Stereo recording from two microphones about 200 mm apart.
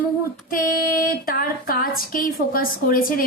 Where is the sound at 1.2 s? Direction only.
45° left (ahead or behind).